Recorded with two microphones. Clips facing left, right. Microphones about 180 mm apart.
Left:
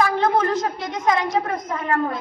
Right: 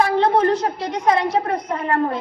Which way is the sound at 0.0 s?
35° right (ahead or behind).